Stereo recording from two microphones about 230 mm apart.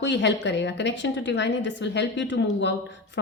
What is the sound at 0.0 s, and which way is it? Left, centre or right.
A woman's voice, left.